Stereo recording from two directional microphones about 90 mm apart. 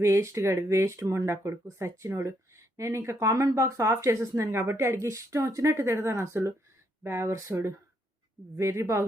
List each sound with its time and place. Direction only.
0.0 s speech: 35° right (ahead or behind)